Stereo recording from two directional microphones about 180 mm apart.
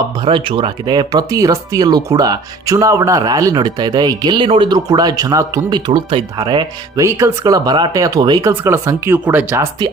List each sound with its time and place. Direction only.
0.3 s speech: 30° right (ahead or behind)
5.9 s speech: 30° right (ahead or behind); by 9.6 s 10° right (ahead or behind)